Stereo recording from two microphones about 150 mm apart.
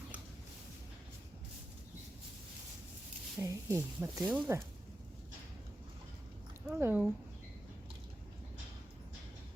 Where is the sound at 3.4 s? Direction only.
20° right (ahead or behind).